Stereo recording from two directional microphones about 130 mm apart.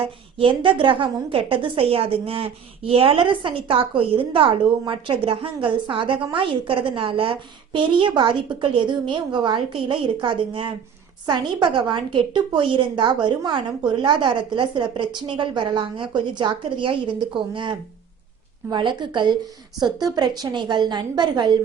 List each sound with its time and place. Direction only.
0.0 s a woman's voice: 45° right (ahead or behind)